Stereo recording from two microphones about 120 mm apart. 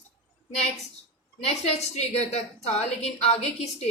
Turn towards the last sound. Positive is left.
turn(degrees=65)  # may be behind; listen again after turning